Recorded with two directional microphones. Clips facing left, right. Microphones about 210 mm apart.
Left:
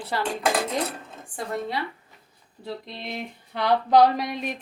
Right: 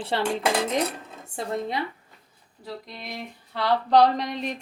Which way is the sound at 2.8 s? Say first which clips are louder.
Left 3 dB; 25° left (ahead or behind).